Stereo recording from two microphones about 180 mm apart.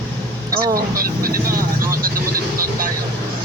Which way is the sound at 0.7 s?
55° right (ahead or behind).